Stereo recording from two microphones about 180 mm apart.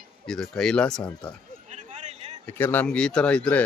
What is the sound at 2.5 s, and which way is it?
Speech, 10° left (ahead or behind).